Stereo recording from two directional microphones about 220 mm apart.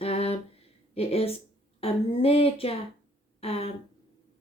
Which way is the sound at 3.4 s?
25° left (ahead or behind).